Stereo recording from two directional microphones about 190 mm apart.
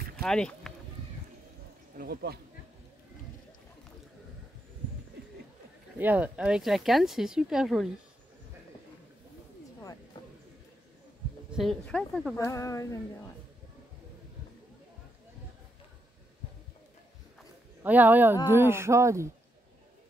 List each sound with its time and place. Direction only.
0.2 s a sound: 5° left (ahead or behind)
2.0 s speech: 55° right (ahead or behind)
5.9 s speech: 10° right (ahead or behind)
11.5 s speech: 5° left (ahead or behind)
12.4 s speech: 15° left (ahead or behind)
17.8 s speech: 10° right (ahead or behind)